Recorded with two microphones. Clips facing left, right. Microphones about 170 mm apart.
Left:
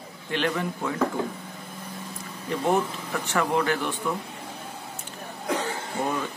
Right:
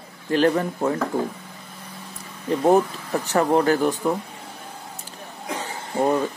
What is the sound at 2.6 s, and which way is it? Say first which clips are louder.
A man's voice: right 6 dB; 35° right (ahead or behind).